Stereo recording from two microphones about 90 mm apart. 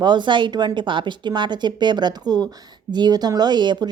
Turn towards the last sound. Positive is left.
turn(degrees=-55)  # may be behind; listen again after turning